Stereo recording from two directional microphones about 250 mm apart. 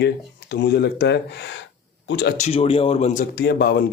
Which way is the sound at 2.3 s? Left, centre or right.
Left.